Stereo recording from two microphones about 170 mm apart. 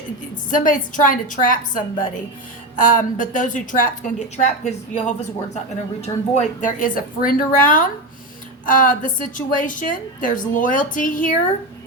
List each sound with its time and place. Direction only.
0.5 s a woman's voice: 50° left (ahead or behind)